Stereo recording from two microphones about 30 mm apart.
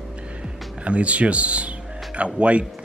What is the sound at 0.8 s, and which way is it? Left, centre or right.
Speech, right.